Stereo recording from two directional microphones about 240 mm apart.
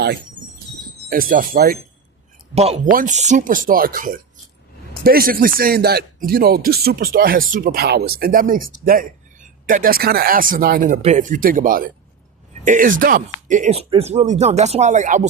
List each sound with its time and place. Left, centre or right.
1.1 s speech: right
2.6 s speech: right